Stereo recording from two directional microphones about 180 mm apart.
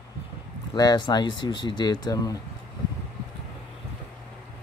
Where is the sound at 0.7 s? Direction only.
25° left (ahead or behind).